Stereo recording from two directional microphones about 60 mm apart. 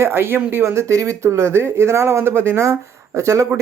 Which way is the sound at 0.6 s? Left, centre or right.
Right.